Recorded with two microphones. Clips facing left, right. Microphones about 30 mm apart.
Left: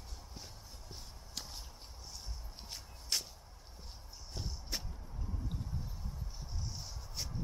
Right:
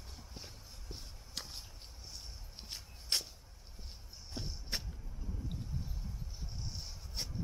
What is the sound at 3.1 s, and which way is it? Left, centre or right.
Whip, right.